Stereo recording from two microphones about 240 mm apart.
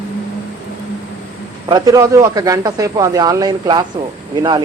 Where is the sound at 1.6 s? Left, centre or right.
Centre.